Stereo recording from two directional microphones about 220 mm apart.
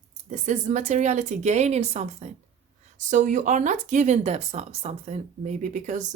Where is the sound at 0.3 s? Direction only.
35° right (ahead or behind).